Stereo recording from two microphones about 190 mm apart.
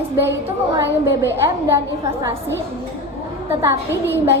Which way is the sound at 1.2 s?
15° right (ahead or behind).